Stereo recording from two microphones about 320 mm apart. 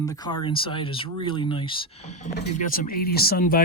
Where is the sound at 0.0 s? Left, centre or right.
Centre.